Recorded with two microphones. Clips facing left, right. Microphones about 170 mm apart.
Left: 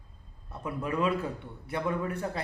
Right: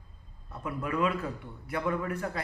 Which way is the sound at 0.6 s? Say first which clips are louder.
Left 1 dB; 25° left (ahead or behind).